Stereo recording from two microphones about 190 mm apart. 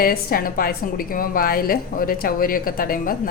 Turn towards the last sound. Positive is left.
turn(degrees=50)  # may be behind; listen again after turning